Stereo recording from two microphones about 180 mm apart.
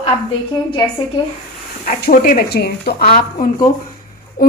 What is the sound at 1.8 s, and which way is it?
Speech, 50° left (ahead or behind).